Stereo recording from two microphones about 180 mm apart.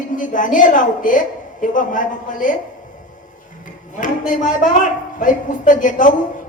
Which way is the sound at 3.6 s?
45° left (ahead or behind).